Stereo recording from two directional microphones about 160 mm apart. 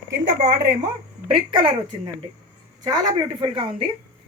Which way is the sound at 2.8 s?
25° right (ahead or behind).